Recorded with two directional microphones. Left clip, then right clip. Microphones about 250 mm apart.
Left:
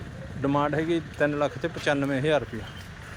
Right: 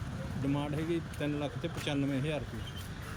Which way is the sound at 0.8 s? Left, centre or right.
Centre.